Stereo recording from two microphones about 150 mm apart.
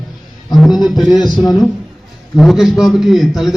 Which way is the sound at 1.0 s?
Centre (ahead or behind).